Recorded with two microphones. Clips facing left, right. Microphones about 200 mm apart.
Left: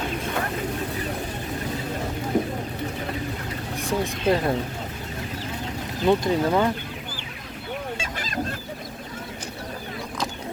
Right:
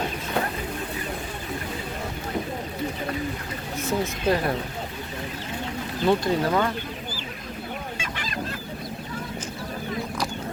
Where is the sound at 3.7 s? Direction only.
15° left (ahead or behind).